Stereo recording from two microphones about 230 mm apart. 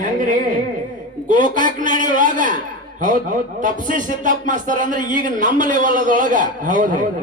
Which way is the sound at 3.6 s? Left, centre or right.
Right.